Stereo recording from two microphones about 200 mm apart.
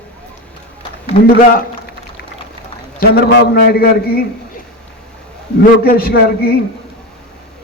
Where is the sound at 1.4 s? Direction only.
45° left (ahead or behind).